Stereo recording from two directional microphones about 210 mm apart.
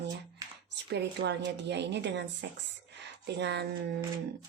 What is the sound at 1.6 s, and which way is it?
A woman's voice, 55° right (ahead or behind).